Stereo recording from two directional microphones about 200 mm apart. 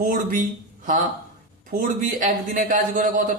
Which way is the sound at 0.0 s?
45° right (ahead or behind).